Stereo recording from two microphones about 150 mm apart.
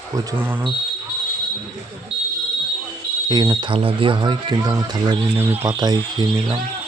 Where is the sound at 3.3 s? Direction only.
25° right (ahead or behind).